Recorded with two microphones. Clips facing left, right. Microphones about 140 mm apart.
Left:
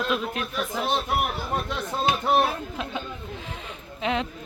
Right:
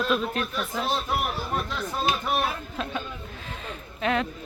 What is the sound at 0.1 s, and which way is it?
Speech, 10° left (ahead or behind).